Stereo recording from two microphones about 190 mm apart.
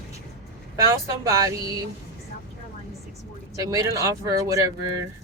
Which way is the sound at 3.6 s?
15° right (ahead or behind).